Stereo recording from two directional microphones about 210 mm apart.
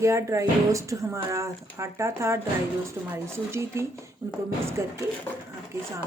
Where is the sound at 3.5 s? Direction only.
15° right (ahead or behind).